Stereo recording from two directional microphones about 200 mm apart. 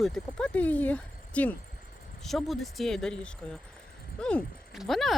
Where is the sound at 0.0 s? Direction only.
Centre (ahead or behind).